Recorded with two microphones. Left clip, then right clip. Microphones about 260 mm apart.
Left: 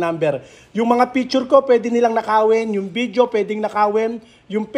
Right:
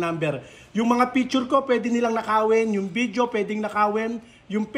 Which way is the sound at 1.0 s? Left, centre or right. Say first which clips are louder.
Left 5 dB; centre.